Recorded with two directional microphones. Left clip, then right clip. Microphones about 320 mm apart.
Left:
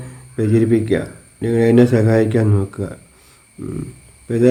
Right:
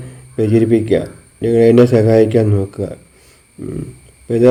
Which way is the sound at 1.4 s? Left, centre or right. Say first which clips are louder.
Right 5 dB; left.